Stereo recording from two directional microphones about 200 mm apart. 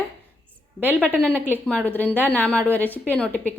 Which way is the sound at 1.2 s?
5° left (ahead or behind).